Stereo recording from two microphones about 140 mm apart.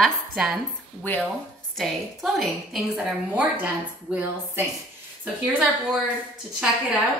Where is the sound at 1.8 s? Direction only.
Centre (ahead or behind).